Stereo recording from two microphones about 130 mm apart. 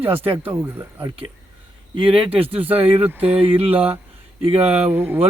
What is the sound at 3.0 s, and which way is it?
Speech, 15° right (ahead or behind).